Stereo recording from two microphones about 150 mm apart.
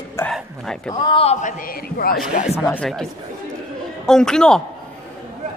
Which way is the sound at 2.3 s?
50° left (ahead or behind).